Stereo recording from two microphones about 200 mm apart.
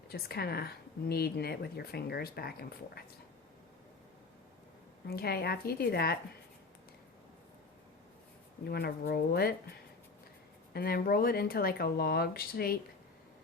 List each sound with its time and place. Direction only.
0.1 s speech: 50° left (ahead or behind)
5.0 s speech: 50° left (ahead or behind)
8.6 s speech: 50° left (ahead or behind)
10.8 s speech: 50° left (ahead or behind)